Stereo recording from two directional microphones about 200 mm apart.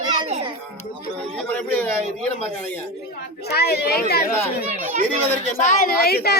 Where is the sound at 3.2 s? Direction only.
55° left (ahead or behind).